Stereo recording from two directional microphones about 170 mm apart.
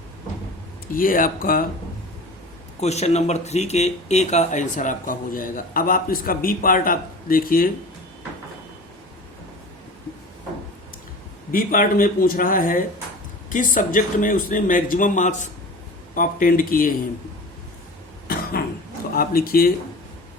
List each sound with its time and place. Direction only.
0.9 s speech: 55° left (ahead or behind)
2.8 s speech: 40° left (ahead or behind); by 7.7 s 55° left (ahead or behind)
11.5 s speech: 55° left (ahead or behind)
19.1 s speech: 60° left (ahead or behind)